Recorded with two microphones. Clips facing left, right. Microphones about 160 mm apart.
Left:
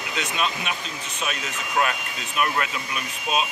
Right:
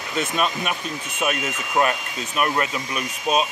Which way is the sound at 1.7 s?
40° right (ahead or behind).